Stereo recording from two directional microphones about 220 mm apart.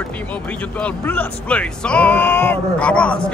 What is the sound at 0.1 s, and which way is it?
Speech, 5° left (ahead or behind).